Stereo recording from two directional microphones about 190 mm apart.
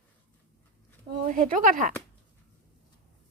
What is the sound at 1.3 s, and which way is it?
Speech, 45° right (ahead or behind).